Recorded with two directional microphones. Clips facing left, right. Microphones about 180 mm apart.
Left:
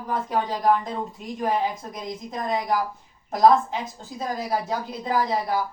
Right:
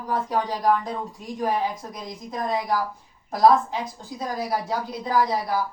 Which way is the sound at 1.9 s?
20° left (ahead or behind).